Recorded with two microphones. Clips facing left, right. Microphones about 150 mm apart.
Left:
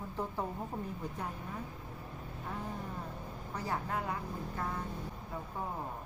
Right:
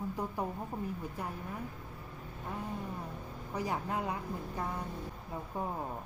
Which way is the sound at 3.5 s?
15° right (ahead or behind).